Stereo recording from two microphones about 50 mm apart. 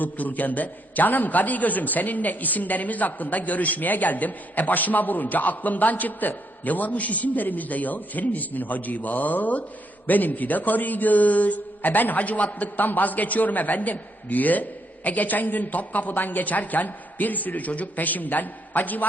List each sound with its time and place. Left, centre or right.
0.0 s a man's voice: left